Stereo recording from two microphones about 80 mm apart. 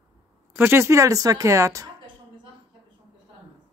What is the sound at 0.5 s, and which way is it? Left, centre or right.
Speech, right.